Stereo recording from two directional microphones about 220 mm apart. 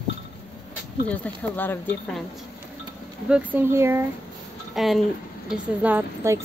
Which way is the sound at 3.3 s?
10° right (ahead or behind).